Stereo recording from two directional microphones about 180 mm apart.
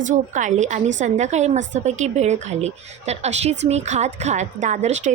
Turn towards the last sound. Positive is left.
turn(degrees=-40)  # may be behind; listen again after turning